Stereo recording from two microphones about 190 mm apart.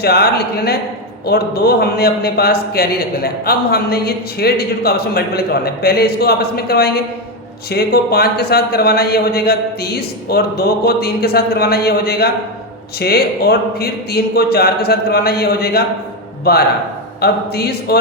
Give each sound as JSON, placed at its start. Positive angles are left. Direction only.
{"t": 0.0, "sound": "a man's voice", "side_deg": 55}